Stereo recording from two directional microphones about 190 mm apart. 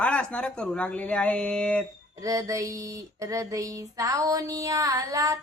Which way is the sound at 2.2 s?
15° right (ahead or behind).